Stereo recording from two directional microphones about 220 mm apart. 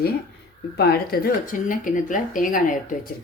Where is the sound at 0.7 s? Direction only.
45° left (ahead or behind).